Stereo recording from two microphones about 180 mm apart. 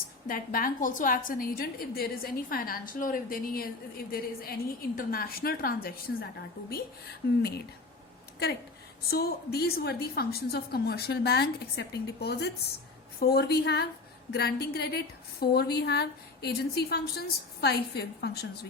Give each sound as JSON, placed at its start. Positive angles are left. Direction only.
{"t": 0.3, "sound": "a woman's voice", "side_deg": 50}
{"t": 8.4, "sound": "a woman's voice", "side_deg": 60}